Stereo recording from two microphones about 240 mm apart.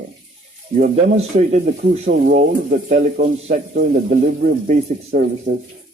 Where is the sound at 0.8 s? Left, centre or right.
Right.